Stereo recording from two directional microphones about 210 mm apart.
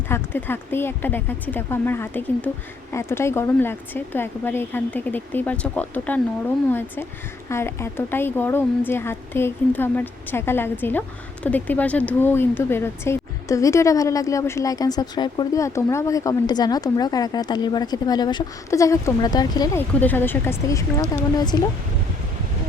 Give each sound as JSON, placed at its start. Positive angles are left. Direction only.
{"t": 0.1, "sound": "speech", "side_deg": 10}